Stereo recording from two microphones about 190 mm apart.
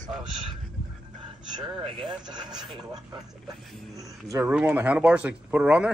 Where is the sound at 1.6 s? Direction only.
25° right (ahead or behind); by 5.9 s 5° right (ahead or behind).